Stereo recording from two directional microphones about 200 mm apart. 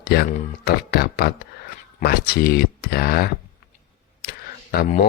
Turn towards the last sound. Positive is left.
turn(degrees=50)  # may be behind; listen again after turning